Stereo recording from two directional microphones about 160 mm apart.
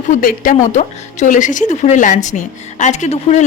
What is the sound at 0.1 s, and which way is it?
A woman's voice, 60° left (ahead or behind).